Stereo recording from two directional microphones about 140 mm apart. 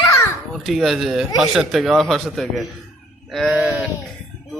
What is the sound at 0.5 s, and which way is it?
A man's voice, centre (ahead or behind).